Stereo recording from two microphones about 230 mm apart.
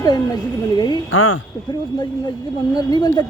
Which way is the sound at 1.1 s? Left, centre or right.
Left.